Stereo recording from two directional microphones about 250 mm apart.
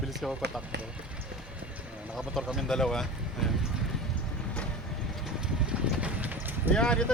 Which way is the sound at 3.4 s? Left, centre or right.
Centre.